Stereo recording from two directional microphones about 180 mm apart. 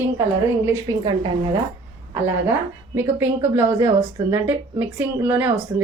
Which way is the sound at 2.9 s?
10° right (ahead or behind).